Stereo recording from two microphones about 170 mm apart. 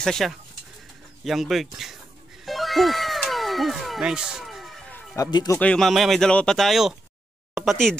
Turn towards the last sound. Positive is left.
turn(degrees=0)  # may be behind; listen again after turning